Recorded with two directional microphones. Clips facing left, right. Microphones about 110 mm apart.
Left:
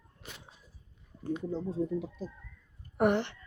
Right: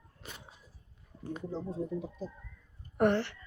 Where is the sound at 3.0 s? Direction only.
15° left (ahead or behind).